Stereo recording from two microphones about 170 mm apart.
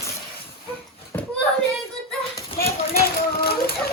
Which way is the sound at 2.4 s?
65° left (ahead or behind).